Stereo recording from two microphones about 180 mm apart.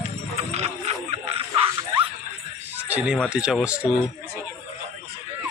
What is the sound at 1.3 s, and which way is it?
Bow-wow, 35° right (ahead or behind).